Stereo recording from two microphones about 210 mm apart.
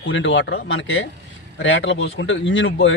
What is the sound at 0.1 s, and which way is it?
Speech, 65° left (ahead or behind).